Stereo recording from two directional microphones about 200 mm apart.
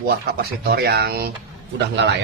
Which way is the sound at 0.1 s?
50° right (ahead or behind).